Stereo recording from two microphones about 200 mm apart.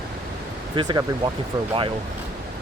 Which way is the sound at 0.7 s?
25° right (ahead or behind).